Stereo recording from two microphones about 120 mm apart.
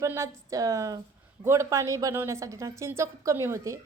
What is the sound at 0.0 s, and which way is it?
A woman's voice, 25° right (ahead or behind).